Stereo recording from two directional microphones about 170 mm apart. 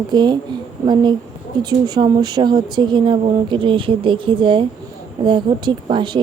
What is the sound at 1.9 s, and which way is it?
Speech, 25° right (ahead or behind).